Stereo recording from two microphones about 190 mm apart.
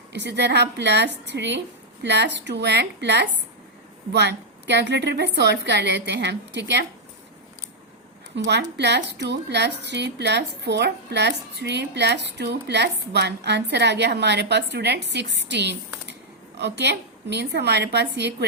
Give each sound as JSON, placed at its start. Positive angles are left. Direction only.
{"t": 0.1, "sound": "a woman's voice", "side_deg": -65}
{"t": 8.4, "sound": "a woman's voice", "side_deg": -65}